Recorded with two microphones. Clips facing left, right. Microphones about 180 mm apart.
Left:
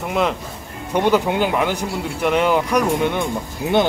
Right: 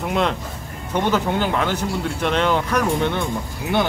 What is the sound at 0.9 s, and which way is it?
Speech, 10° left (ahead or behind).